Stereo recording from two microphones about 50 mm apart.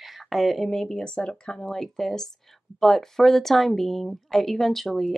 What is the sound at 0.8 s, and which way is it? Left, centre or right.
Speech, centre.